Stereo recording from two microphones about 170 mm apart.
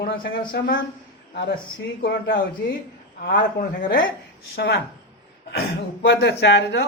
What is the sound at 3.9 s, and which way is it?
Speech, 90° left.